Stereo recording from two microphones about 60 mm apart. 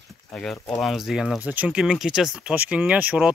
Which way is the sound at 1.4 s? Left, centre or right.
Right.